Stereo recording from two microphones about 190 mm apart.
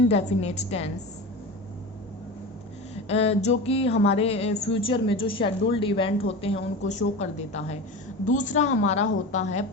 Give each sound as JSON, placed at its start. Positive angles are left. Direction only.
{"t": 0.1, "sound": "a woman's voice", "side_deg": 35}
{"t": 3.1, "sound": "a woman's voice", "side_deg": 30}